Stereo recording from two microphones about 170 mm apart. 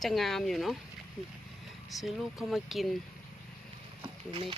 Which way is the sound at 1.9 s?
Centre (ahead or behind).